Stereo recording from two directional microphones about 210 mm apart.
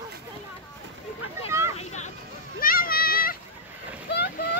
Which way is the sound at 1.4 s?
10° right (ahead or behind).